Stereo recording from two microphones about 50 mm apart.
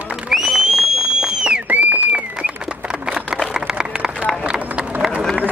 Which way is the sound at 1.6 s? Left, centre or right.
Right.